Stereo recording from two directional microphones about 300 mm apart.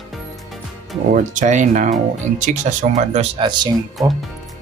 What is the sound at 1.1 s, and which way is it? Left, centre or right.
Speech, right.